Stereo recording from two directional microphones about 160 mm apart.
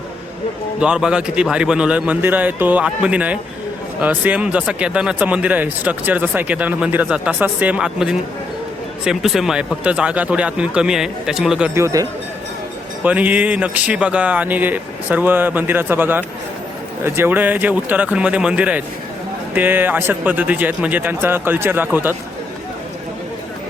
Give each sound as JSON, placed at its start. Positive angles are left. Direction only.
{"t": 0.8, "sound": "speech", "side_deg": -5}
{"t": 11.7, "sound": "speech", "side_deg": -20}
{"t": 13.0, "sound": "speech", "side_deg": -10}